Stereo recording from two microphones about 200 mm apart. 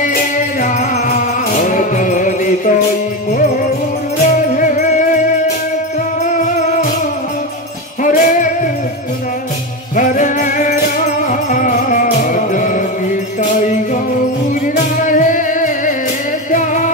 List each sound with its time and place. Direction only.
0.0 s music: 40° left (ahead or behind)
4.2 s music: 35° left (ahead or behind)
6.2 s music: 40° left (ahead or behind)
8.0 s jingle bell: 40° left (ahead or behind)
9.9 s music: 40° left (ahead or behind)
15.0 s music: 40° left (ahead or behind)